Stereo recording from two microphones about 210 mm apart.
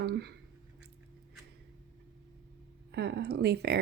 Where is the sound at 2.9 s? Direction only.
55° right (ahead or behind).